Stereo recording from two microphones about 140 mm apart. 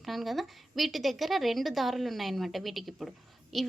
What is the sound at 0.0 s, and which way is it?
A woman's voice, centre (ahead or behind).